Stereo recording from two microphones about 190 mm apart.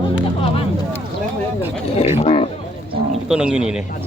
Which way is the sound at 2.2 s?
35° left (ahead or behind).